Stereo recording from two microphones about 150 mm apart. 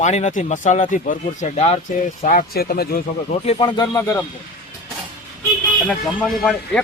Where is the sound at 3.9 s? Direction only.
20° left (ahead or behind).